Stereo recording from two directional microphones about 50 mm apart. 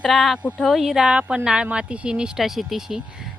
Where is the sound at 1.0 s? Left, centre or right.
Centre.